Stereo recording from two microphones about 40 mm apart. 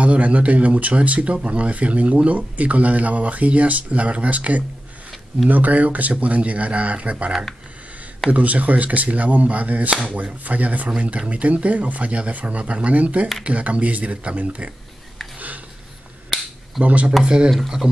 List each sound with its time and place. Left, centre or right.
0.0 s speech: right
15.3 s a sound: right
16.8 s speech: right
17.2 s speech: right
17.5 s stir: centre